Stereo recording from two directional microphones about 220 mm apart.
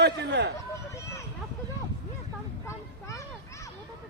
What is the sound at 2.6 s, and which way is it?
Vehicle, 15° left (ahead or behind).